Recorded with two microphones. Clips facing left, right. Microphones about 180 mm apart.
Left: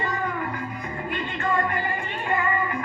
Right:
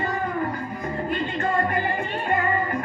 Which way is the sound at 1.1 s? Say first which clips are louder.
Right 1 dB; 40° right (ahead or behind).